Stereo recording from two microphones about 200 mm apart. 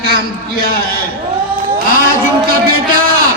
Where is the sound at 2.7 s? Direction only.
45° right (ahead or behind).